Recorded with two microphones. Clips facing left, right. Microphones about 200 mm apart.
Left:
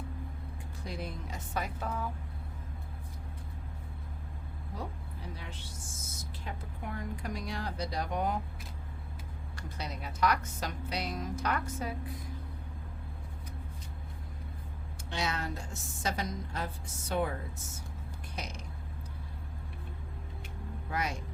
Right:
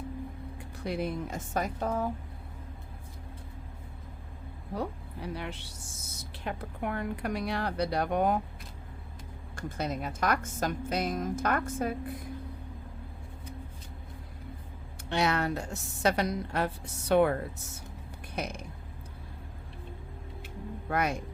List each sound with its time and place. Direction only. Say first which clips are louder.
0.9 s a woman's voice: right 8 dB; 60° right (ahead or behind); by 2.0 s 40° right (ahead or behind)
4.7 s a woman's voice: right 8 dB; 65° right (ahead or behind)
9.6 s a woman's voice: right 8 dB; 50° right (ahead or behind)
15.1 s a woman's voice: right 7 dB; 65° right (ahead or behind)
18.3 s a woman's voice: right 7 dB; 55° right (ahead or behind)
20.9 s a woman's voice: right 6 dB; 55° right (ahead or behind)